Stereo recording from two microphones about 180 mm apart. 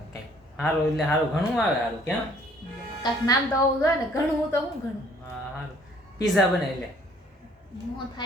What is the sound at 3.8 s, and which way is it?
Speech, 15° left (ahead or behind).